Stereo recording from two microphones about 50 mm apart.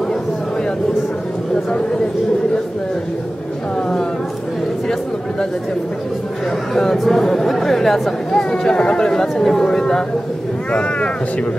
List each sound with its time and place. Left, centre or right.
6.7 s speech: centre
8.4 s speech: centre